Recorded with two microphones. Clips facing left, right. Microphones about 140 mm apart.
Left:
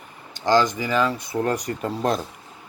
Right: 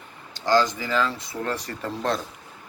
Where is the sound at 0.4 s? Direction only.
20° left (ahead or behind).